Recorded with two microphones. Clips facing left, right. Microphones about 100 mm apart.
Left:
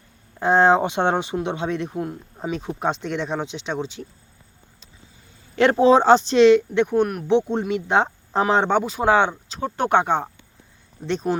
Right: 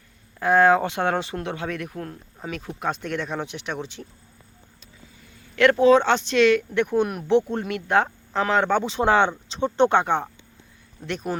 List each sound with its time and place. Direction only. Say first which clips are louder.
0.3 s speech: left 1 dB; 25° left (ahead or behind)
5.5 s speech: left 1 dB; 30° left (ahead or behind)
6.9 s speech: left 2 dB; 5° right (ahead or behind)
7.3 s speech: left 1 dB; 20° left (ahead or behind)
8.8 s speech: left 1 dB; 5° left (ahead or behind); by 11.3 s 25° left (ahead or behind)